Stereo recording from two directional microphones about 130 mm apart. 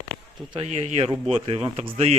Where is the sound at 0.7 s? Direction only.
55° right (ahead or behind).